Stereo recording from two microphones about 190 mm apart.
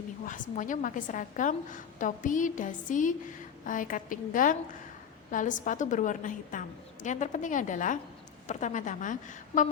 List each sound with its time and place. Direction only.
0.3 s a woman's voice: 45° left (ahead or behind)